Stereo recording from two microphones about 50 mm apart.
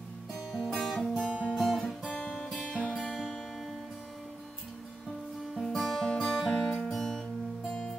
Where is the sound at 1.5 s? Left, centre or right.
Centre.